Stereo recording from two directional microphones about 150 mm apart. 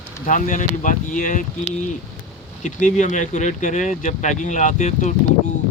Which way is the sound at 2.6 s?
55° left (ahead or behind).